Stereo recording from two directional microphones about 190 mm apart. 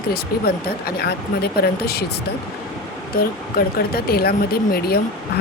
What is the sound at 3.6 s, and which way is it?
Speech, 50° left (ahead or behind).